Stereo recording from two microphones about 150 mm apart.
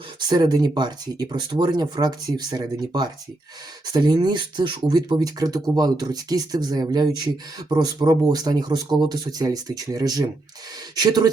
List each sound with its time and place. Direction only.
0.2 s speech: 30° right (ahead or behind)